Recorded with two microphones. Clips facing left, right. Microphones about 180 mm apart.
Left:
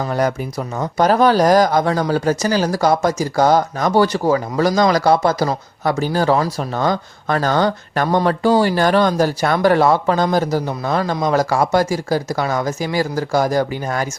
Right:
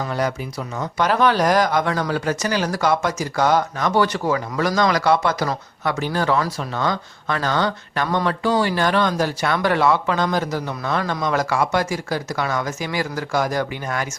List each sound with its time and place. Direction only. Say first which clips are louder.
0.0 s speech: left 4 dB; 45° left (ahead or behind)